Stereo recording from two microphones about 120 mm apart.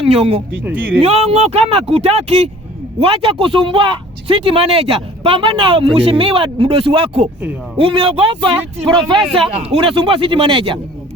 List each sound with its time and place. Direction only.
0.0 s speech: 55° right (ahead or behind)
0.6 s speech: 15° right (ahead or behind)
1.0 s speech: 60° right (ahead or behind)
3.0 s speech: 50° right (ahead or behind)